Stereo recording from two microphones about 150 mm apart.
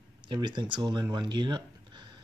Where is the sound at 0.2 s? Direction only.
30° right (ahead or behind).